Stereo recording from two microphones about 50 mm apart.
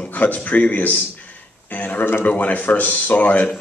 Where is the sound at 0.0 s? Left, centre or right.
Left.